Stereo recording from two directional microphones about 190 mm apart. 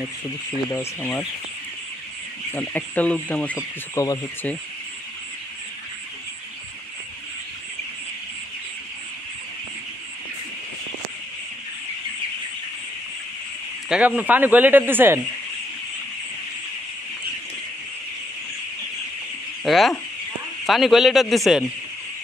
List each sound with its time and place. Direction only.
0.7 s speech: 10° left (ahead or behind)
2.5 s speech: 10° left (ahead or behind)
4.0 s speech: 20° left (ahead or behind)
13.8 s a man's voice: 5° right (ahead or behind)
19.6 s speech: centre (ahead or behind)